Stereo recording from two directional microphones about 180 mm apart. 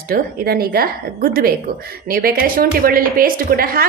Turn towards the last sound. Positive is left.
turn(degrees=-55)  # may be behind; listen again after turning